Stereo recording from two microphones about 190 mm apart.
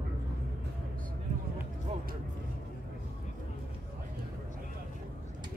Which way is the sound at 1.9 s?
35° right (ahead or behind).